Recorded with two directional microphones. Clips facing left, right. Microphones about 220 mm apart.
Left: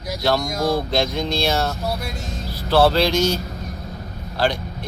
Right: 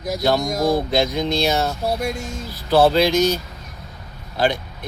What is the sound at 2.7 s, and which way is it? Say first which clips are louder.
Speech: right 1 dB; 20° right (ahead or behind).